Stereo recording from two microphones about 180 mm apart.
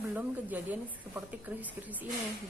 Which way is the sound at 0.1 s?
10° right (ahead or behind).